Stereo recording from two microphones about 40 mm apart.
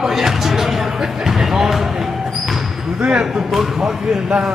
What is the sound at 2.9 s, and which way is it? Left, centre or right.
Speech, right.